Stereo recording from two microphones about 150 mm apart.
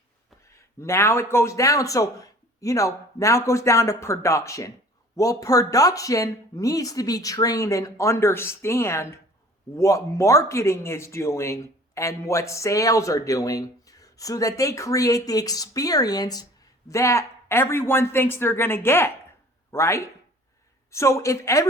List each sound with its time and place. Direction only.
0.4 s speech: 20° left (ahead or behind)